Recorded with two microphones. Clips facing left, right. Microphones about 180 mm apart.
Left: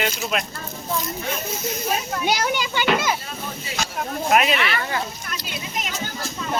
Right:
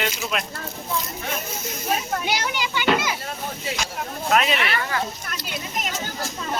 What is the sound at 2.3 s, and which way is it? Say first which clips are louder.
Speech: left 3 dB; 45° left (ahead or behind).